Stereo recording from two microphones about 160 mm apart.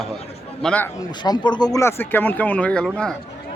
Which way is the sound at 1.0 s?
25° left (ahead or behind).